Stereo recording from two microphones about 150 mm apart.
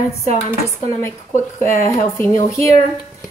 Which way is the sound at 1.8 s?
15° left (ahead or behind).